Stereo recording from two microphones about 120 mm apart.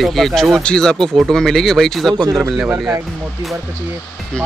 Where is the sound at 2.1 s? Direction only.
30° right (ahead or behind).